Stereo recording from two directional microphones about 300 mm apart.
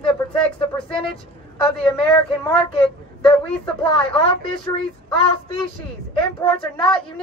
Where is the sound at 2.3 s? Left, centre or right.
Centre.